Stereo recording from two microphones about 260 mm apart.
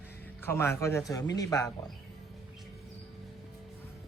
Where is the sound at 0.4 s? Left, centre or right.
Centre.